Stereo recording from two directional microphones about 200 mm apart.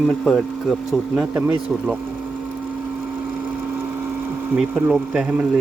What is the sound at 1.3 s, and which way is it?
Speech, 10° right (ahead or behind).